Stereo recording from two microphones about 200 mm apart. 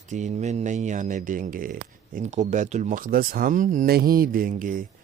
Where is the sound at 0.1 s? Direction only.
35° right (ahead or behind).